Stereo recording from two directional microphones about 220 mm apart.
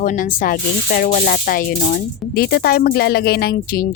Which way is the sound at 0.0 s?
35° left (ahead or behind).